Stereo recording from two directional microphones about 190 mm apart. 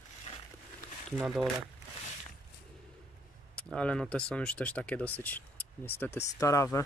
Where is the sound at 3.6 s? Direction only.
5° left (ahead or behind).